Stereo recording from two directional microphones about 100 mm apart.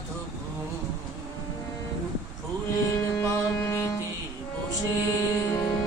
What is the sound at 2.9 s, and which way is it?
Music, 30° left (ahead or behind).